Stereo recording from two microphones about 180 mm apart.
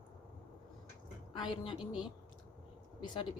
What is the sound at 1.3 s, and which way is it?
Speech, 25° left (ahead or behind).